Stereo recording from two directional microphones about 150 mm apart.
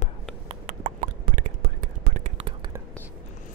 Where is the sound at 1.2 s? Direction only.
75° right (ahead or behind); by 2.4 s 55° right (ahead or behind).